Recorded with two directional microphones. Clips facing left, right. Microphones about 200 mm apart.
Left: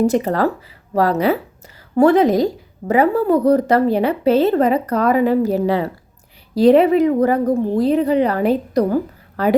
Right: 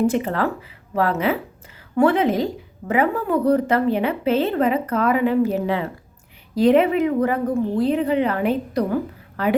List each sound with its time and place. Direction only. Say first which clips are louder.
0.0 s a woman's voice: left 4 dB; 40° left (ahead or behind)